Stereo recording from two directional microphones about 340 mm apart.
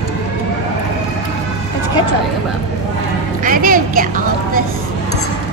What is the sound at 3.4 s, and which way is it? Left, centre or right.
A woman's voice, right.